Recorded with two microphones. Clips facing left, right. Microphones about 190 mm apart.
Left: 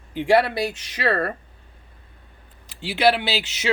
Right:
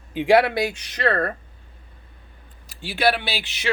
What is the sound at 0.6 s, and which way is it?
Speech, 5° left (ahead or behind).